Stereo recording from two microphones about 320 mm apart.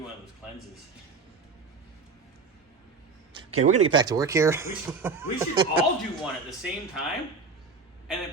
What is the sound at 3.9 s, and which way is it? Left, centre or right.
Speech, centre.